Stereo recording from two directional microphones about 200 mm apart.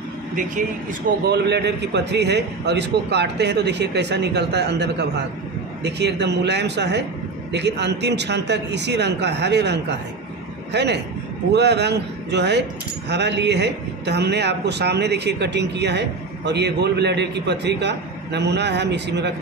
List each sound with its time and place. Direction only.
1.2 s a man's voice: 55° right (ahead or behind)